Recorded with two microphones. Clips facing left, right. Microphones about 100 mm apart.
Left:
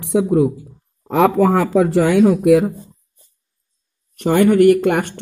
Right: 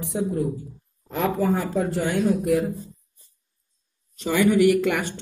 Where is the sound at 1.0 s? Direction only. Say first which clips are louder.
Left 9 dB; 75° left (ahead or behind); by 2.7 s 90° left.